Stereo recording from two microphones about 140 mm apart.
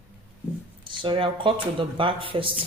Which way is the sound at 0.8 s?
35° right (ahead or behind).